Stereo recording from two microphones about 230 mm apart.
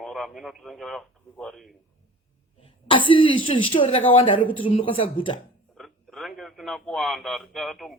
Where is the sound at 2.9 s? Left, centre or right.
Left.